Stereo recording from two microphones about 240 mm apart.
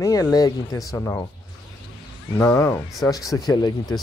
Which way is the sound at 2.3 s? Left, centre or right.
Centre.